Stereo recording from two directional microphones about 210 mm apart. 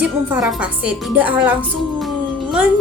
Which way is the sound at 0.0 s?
5° right (ahead or behind).